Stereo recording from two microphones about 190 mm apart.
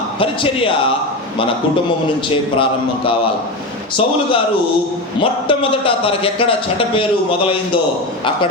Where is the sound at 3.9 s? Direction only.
25° left (ahead or behind).